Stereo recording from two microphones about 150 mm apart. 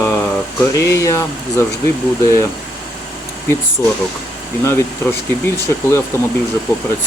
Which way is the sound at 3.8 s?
15° left (ahead or behind).